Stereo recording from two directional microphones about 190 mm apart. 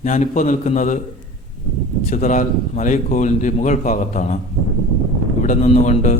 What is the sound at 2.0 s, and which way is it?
A man's voice, 40° left (ahead or behind).